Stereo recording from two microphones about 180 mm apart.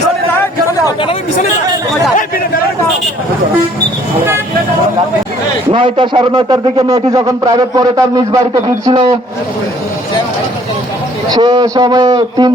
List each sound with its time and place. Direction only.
5.7 s speech: 30° right (ahead or behind)
11.3 s speech: 25° right (ahead or behind)